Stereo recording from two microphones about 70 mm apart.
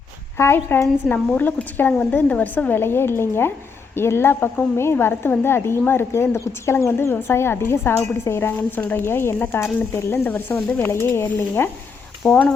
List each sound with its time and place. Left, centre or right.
0.3 s a woman's voice: left
1.4 s a woman's voice: left
12.3 s a woman's voice: centre